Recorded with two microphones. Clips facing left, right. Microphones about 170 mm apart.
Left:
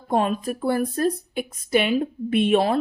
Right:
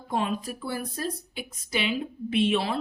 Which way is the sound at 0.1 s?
50° left (ahead or behind).